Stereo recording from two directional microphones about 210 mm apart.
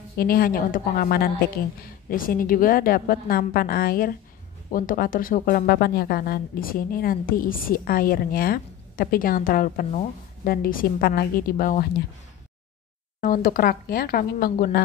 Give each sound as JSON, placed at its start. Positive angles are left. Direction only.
{"t": 0.2, "sound": "speech", "side_deg": 45}
{"t": 13.2, "sound": "speech", "side_deg": 45}